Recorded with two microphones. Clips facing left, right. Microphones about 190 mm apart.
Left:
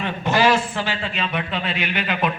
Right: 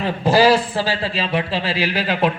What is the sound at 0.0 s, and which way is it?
A man's voice, 35° right (ahead or behind).